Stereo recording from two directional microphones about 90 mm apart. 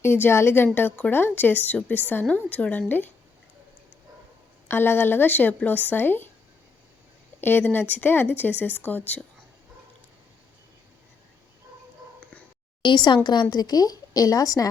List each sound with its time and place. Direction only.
0.0 s a woman's voice: 25° left (ahead or behind)
4.7 s a woman's voice: 25° left (ahead or behind)
7.4 s a woman's voice: 25° left (ahead or behind)
12.2 s whispering: 15° left (ahead or behind)
12.8 s a woman's voice: 60° left (ahead or behind); by 14.7 s 40° left (ahead or behind)